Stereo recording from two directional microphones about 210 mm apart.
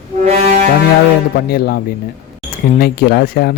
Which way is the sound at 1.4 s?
45° left (ahead or behind).